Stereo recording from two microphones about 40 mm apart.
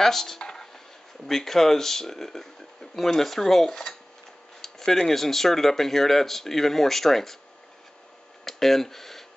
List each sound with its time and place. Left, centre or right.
0.0 s speech: centre
0.4 s a sound: centre
1.2 s speech: centre
8.5 s speech: centre